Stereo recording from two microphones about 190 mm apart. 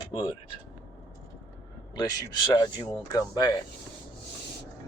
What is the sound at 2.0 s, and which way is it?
Speech, 20° left (ahead or behind).